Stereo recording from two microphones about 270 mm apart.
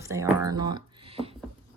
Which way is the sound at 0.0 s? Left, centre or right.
Centre.